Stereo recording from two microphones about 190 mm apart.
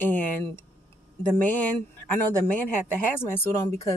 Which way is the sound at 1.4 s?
10° left (ahead or behind).